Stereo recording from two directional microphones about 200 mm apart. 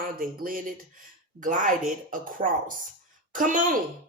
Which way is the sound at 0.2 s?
45° right (ahead or behind).